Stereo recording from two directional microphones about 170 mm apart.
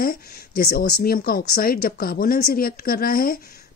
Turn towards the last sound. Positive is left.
turn(degrees=55)  # may be behind; listen again after turning